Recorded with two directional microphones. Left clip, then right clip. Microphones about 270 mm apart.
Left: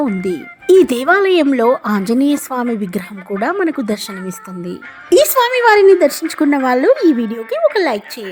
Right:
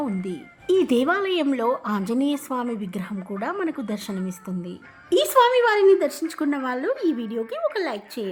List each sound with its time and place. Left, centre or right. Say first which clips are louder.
0.7 s speech: left 10 dB; left
7.1 s speech: left 11 dB; left
7.3 s speech: left 11 dB; left